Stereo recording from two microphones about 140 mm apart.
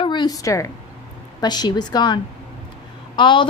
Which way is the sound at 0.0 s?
30° left (ahead or behind).